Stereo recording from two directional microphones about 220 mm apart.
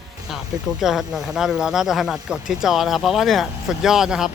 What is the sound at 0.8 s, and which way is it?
Speech, centre (ahead or behind).